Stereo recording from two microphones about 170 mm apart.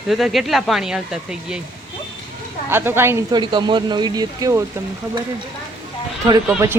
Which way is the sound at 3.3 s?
25° right (ahead or behind).